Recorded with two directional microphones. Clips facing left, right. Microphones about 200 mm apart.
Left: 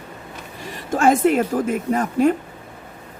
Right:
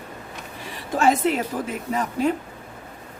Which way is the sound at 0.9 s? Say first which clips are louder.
Left 4 dB; 50° left (ahead or behind).